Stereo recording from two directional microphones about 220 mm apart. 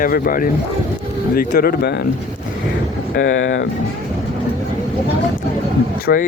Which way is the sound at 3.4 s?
60° left (ahead or behind).